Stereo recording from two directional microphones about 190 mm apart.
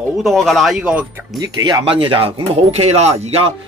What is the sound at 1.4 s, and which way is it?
Speech, 20° right (ahead or behind).